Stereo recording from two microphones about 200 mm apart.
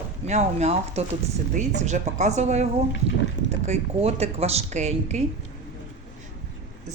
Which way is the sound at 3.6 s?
30° right (ahead or behind).